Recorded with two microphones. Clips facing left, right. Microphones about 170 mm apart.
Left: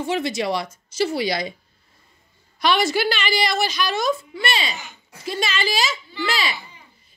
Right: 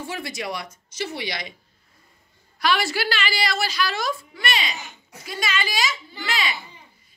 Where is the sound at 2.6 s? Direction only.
20° left (ahead or behind).